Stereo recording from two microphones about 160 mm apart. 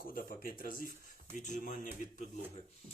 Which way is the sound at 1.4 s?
50° left (ahead or behind).